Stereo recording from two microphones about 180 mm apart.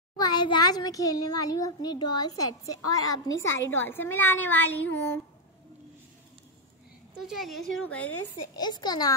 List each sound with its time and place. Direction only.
0.2 s a child's voice: 25° left (ahead or behind)
3.3 s a woman's voice: 90° left
3.8 s a woman's voice: 10° left (ahead or behind)
7.2 s a woman's voice: centre (ahead or behind)
8.5 s a child's voice: 25° left (ahead or behind)